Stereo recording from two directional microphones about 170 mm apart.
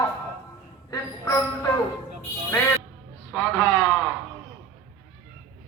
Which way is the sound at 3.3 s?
5° left (ahead or behind).